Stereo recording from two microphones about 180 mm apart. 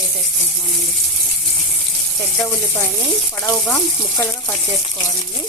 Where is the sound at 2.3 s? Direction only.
10° left (ahead or behind).